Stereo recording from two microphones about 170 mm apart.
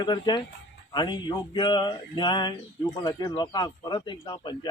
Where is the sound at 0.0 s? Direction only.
25° left (ahead or behind).